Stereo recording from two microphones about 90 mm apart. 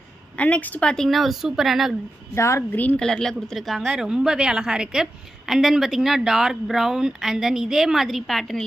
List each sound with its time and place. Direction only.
0.4 s a woman's voice: 15° left (ahead or behind); by 2.0 s 5° right (ahead or behind)
2.3 s a woman's voice: 35° left (ahead or behind)
2.7 s a woman's voice: 20° left (ahead or behind)
3.0 s a woman's voice: 5° left (ahead or behind)